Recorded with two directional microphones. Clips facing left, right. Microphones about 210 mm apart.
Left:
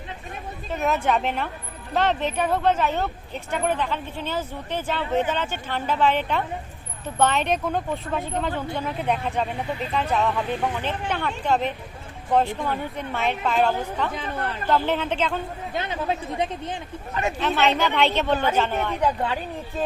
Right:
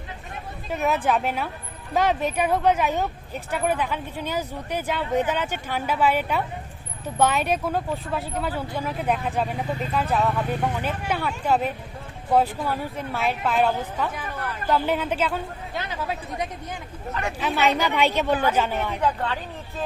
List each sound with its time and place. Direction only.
0.7 s speech: centre (ahead or behind)
14.1 s speech: 25° left (ahead or behind)
14.7 s speech: 10° right (ahead or behind)
15.7 s speech: 25° left (ahead or behind)
17.4 s speech: 10° right (ahead or behind)
18.9 s speech: 15° left (ahead or behind)